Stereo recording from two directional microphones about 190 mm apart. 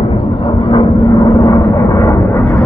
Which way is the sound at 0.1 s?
30° left (ahead or behind).